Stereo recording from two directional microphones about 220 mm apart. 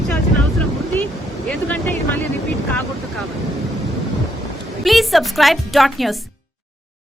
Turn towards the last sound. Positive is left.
turn(degrees=0)  # may be behind; listen again after turning